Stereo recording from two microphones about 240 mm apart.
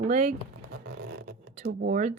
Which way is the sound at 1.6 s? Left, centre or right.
Right.